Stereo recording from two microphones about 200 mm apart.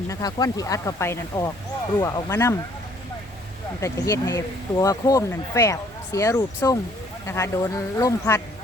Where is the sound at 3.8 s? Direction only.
15° left (ahead or behind).